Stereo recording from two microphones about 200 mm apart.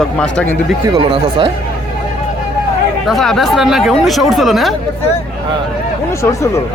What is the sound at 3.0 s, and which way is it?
Speech, centre (ahead or behind).